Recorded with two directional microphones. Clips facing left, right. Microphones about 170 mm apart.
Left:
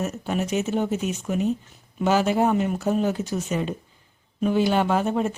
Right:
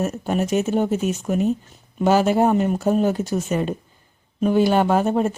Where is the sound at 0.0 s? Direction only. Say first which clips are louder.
Right 4 dB; 45° right (ahead or behind).